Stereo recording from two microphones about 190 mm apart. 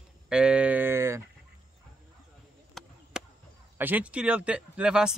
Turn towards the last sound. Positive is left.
turn(degrees=-5)  # may be behind; listen again after turning